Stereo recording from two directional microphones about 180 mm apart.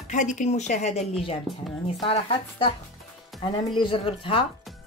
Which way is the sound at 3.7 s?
30° left (ahead or behind).